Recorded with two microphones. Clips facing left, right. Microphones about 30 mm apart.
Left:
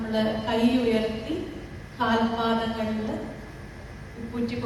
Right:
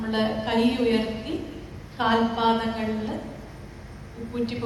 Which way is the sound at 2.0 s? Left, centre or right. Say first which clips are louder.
Right 2 dB; right.